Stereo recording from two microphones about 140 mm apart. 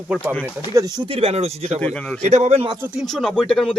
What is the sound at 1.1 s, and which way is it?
Speech, 45° right (ahead or behind).